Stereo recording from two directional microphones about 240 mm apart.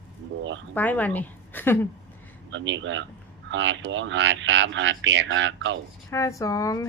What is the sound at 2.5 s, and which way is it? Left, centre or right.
Speech, right.